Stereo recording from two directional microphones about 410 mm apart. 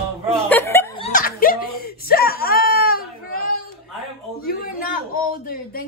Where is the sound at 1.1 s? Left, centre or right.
Centre.